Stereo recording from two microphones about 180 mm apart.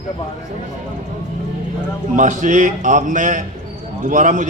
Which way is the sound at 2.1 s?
45° right (ahead or behind).